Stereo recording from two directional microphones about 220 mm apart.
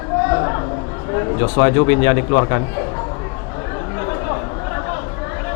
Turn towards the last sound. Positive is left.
turn(degrees=20)  # may be behind; listen again after turning